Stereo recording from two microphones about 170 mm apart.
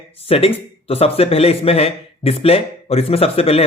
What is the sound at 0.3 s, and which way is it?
Speech, 35° left (ahead or behind).